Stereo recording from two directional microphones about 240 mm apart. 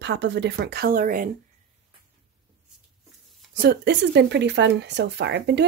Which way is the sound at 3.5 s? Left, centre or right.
Right.